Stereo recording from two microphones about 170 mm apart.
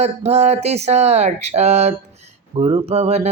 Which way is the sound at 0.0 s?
40° right (ahead or behind).